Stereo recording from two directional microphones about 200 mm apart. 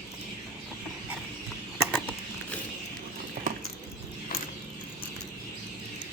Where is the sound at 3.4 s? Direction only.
50° right (ahead or behind).